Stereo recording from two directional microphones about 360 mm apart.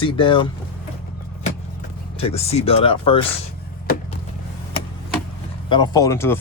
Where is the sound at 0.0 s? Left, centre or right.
Centre.